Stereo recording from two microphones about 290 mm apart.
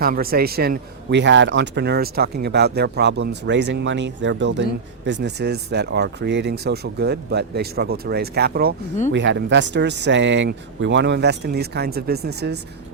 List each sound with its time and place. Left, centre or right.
0.0 s speech: right